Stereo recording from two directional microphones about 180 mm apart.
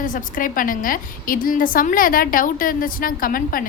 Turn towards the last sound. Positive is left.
turn(degrees=50)  # may be behind; listen again after turning